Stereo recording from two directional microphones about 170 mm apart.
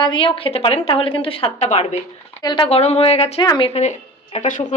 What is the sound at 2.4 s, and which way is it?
A woman's voice, 25° left (ahead or behind).